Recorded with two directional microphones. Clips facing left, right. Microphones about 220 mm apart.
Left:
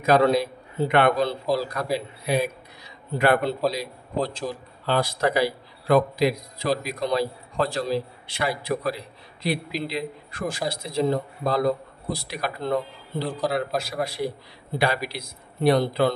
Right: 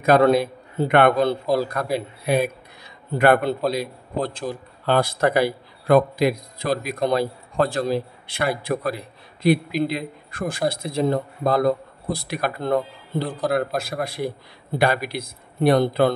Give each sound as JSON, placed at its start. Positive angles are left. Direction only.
{"t": 0.0, "sound": "a man's voice", "side_deg": -55}